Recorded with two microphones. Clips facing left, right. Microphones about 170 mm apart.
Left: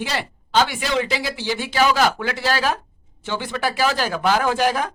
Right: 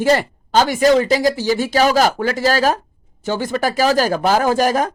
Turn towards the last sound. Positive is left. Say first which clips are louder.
# right 4 dB
turn(degrees=-40)  # may be behind; listen again after turning